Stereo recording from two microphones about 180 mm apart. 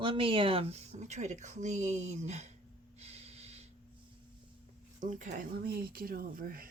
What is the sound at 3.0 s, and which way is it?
Snort, 35° right (ahead or behind).